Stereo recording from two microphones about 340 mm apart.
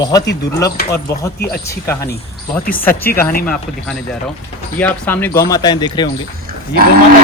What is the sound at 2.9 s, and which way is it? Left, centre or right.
Speech, left.